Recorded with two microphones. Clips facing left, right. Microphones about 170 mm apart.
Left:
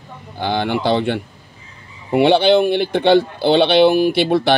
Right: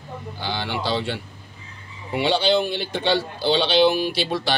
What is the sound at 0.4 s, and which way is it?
Speech, 55° left (ahead or behind).